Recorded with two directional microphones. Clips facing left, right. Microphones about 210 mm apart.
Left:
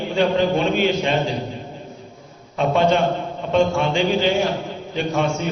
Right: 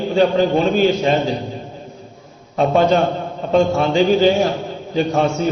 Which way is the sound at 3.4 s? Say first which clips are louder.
Right 3 dB; 40° right (ahead or behind).